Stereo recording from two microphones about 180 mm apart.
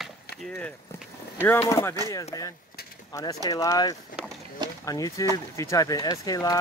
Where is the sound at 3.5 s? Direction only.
20° left (ahead or behind).